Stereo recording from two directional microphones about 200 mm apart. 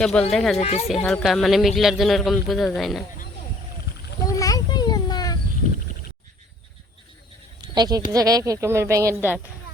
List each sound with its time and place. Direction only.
0.0 s a man's voice: 5° left (ahead or behind)
0.6 s speech: 35° left (ahead or behind)
1.0 s a man's voice: centre (ahead or behind)
4.2 s children playing: 15° left (ahead or behind)
7.6 s sheep: 20° right (ahead or behind)
8.1 s speech: 20° right (ahead or behind)